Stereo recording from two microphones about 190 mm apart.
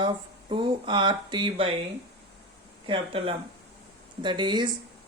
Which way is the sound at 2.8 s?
30° right (ahead or behind).